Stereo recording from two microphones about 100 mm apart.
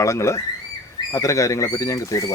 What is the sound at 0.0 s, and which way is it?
Speech, 30° left (ahead or behind).